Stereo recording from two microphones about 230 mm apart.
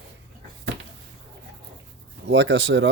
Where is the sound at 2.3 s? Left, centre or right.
Right.